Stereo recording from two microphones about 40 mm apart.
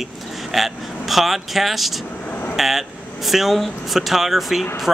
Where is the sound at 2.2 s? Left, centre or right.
Left.